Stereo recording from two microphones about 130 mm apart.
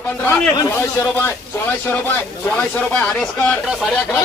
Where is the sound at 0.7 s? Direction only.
15° left (ahead or behind).